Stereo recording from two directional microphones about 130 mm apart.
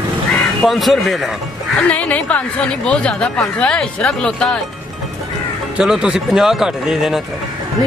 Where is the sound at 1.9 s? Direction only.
10° left (ahead or behind).